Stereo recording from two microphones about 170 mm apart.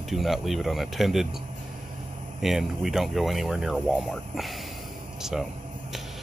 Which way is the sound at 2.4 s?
Centre (ahead or behind).